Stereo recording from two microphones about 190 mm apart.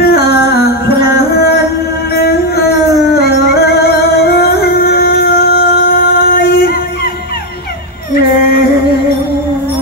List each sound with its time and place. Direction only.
0.0 s music: 55° left (ahead or behind)